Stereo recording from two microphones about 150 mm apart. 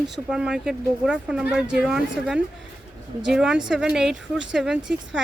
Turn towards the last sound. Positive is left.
turn(degrees=-5)  # may be behind; listen again after turning